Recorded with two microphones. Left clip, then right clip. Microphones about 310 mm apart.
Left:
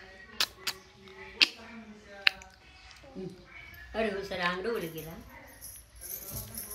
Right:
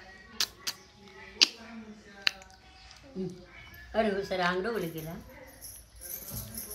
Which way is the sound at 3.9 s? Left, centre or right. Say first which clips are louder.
Right 4 dB; right.